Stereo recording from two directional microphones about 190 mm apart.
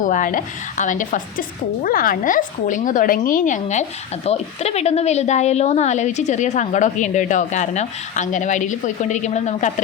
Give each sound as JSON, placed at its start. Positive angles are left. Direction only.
{"t": 0.0, "sound": "a woman's voice", "side_deg": 45}